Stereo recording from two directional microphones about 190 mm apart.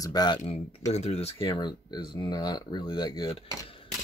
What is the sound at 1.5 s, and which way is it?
Speech, 20° left (ahead or behind).